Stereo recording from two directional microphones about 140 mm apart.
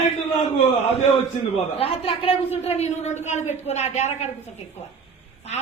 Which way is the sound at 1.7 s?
45° left (ahead or behind).